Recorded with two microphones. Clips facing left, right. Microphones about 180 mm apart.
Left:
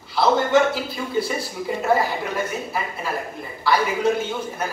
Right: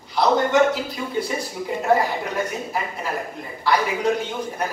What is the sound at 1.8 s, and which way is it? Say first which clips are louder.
A man's voice: right 1 dB; 15° right (ahead or behind).